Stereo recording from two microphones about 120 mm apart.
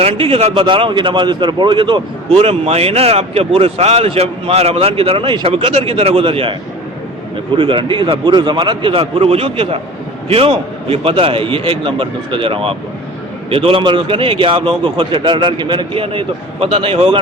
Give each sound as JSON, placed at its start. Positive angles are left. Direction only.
{"t": 0.0, "sound": "a man's voice", "side_deg": -55}
{"t": 0.6, "sound": "a man's voice", "side_deg": -45}
{"t": 2.4, "sound": "speech", "side_deg": -60}